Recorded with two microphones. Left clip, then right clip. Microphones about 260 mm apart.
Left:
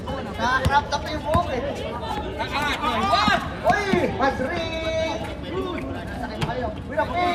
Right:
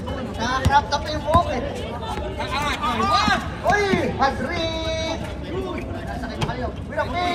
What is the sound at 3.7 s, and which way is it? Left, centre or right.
Speech, right.